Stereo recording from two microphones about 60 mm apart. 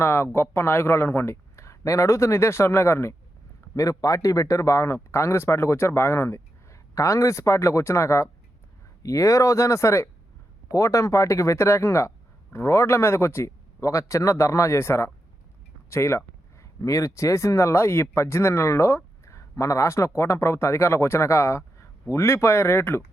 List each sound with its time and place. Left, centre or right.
0.0 s speech: left
3.8 s speech: left
9.0 s speech: left
10.7 s speech: left
13.8 s speech: left
16.8 s speech: left